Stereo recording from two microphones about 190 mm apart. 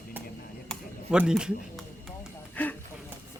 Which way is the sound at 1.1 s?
5° right (ahead or behind).